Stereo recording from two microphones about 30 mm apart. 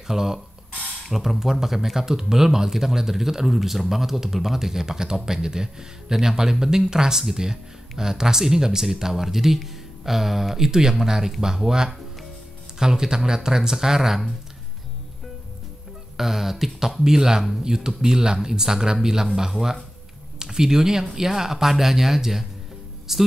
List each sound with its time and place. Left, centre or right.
0.0 s speech: centre
4.8 s speech: right
10.7 s speech: centre
16.2 s speech: centre
17.0 s speech: centre